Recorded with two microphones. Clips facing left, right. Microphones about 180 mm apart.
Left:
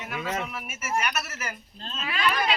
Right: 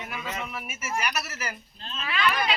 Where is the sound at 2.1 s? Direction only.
40° left (ahead or behind).